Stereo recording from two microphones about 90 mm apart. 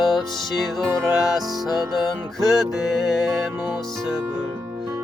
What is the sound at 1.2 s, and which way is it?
Music, centre (ahead or behind).